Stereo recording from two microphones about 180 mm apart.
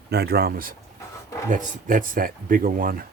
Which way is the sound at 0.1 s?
65° right (ahead or behind).